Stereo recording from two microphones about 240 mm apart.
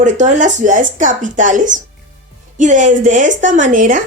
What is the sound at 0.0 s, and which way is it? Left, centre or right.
Speech, right.